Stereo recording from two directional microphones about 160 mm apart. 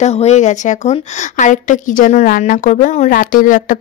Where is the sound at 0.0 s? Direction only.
45° left (ahead or behind).